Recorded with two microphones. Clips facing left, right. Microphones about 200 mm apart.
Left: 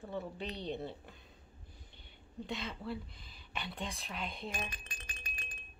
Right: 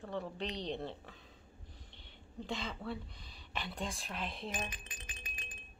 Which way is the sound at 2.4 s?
Centre (ahead or behind).